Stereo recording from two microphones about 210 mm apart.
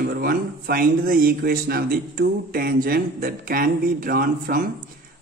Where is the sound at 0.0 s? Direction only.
45° right (ahead or behind).